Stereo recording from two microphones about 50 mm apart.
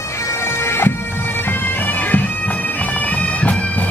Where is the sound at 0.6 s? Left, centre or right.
Left.